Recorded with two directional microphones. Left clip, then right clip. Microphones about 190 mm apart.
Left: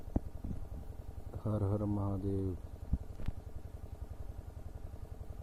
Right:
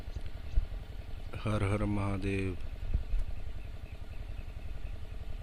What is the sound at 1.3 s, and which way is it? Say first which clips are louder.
Speech: right 4 dB; 20° right (ahead or behind).